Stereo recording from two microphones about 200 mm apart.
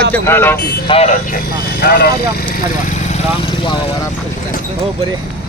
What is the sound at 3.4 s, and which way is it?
Vehicle, 25° left (ahead or behind).